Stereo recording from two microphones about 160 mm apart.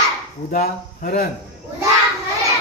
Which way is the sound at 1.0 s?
60° left (ahead or behind).